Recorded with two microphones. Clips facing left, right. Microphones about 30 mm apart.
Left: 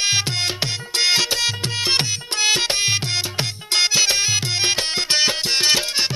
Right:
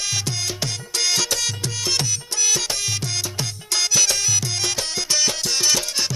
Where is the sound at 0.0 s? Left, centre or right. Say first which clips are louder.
Left 5 dB; left.